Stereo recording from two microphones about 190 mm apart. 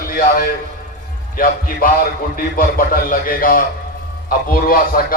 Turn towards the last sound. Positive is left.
turn(degrees=50)  # may be behind; listen again after turning